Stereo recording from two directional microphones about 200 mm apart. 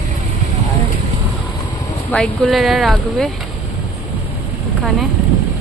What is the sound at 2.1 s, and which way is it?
Speech, centre (ahead or behind).